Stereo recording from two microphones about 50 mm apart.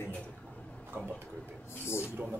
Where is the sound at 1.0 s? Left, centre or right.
Right.